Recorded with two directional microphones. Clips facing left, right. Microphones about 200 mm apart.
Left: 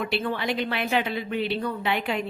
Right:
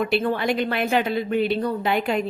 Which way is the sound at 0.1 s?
45° right (ahead or behind).